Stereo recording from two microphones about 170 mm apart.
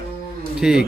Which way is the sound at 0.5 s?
5° right (ahead or behind).